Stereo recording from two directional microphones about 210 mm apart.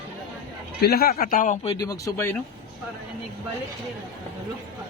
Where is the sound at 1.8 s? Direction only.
15° left (ahead or behind).